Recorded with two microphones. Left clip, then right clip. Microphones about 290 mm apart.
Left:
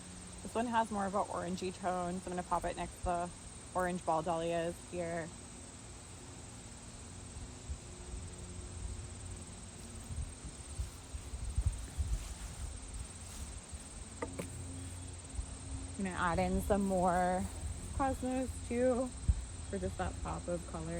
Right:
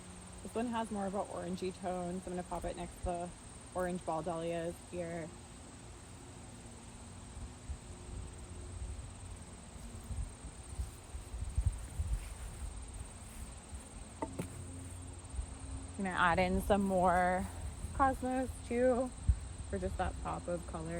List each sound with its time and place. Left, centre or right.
0.5 s speech: centre
16.3 s speech: right
17.9 s speech: centre